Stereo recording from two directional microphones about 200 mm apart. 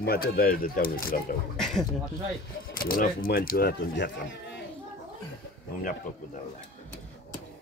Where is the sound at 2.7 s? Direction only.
45° left (ahead or behind); by 4.6 s 60° left (ahead or behind).